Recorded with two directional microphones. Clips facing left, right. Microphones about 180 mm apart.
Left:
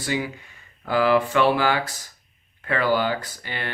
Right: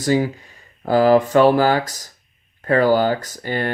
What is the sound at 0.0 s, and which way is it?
Speech, 40° right (ahead or behind).